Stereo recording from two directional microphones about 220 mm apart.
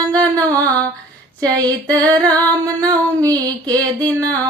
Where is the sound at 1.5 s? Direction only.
15° right (ahead or behind).